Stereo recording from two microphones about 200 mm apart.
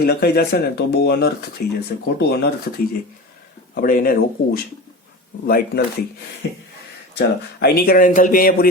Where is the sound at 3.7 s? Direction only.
45° left (ahead or behind).